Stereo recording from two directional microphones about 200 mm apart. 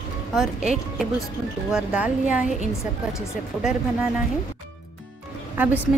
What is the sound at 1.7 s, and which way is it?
A woman's voice, 5° right (ahead or behind).